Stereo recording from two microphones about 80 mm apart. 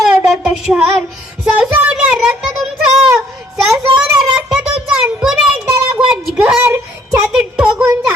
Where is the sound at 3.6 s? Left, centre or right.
Centre.